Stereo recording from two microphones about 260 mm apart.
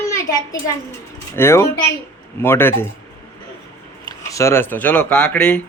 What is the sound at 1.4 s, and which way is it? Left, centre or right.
A man's voice, centre.